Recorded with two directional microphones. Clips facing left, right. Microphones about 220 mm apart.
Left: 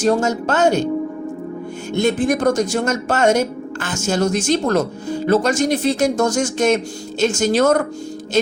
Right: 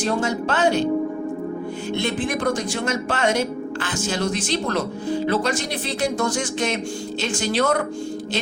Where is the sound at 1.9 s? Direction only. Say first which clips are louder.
Left 8 dB; 45° left (ahead or behind).